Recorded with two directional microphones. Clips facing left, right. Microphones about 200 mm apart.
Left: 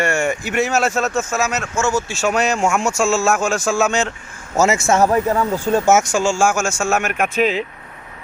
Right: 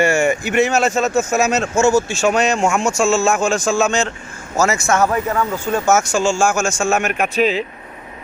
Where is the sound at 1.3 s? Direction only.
25° right (ahead or behind).